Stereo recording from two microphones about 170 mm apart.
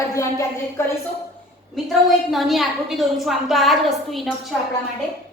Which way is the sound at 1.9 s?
Centre (ahead or behind).